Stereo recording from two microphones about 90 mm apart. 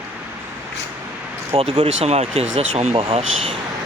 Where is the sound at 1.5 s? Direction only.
90° right.